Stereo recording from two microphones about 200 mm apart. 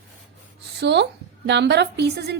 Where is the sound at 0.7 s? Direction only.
60° right (ahead or behind).